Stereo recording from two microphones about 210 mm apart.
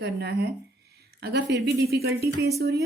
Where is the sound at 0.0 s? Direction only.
50° right (ahead or behind).